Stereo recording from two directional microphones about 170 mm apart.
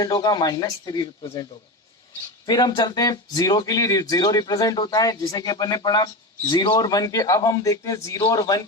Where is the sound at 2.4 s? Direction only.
25° left (ahead or behind).